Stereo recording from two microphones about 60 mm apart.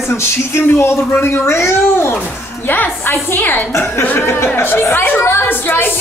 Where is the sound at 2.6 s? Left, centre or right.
Left.